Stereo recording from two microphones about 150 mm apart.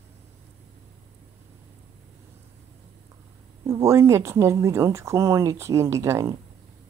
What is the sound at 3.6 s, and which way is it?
Speech, 20° right (ahead or behind).